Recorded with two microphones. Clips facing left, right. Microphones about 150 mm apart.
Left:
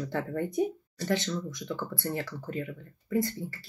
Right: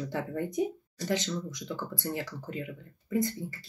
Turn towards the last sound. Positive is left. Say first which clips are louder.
# left 1 dB
turn(degrees=-15)  # may be behind; listen again after turning